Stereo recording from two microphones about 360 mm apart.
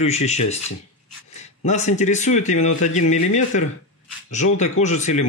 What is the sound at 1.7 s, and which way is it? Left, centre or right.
Speech, centre.